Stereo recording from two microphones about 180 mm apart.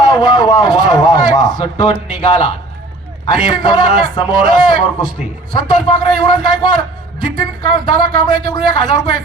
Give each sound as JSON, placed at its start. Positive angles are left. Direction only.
{"t": 0.0, "sound": "a man's voice", "side_deg": 20}